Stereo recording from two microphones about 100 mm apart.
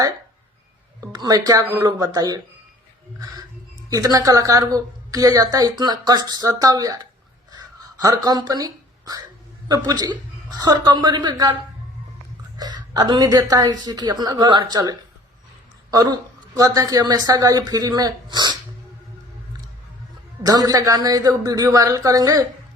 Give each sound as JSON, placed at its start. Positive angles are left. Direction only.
{"t": 1.1, "sound": "a woman's voice", "side_deg": -40}
{"t": 3.8, "sound": "a woman's voice", "side_deg": -35}
{"t": 7.5, "sound": "a sound", "side_deg": -40}
{"t": 9.6, "sound": "a woman's voice", "side_deg": -40}
{"t": 12.5, "sound": "a woman's voice", "side_deg": -40}
{"t": 20.4, "sound": "a woman's voice", "side_deg": -40}